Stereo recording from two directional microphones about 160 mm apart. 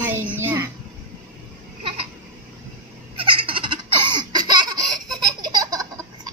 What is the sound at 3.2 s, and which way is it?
Baby laughter, 35° right (ahead or behind).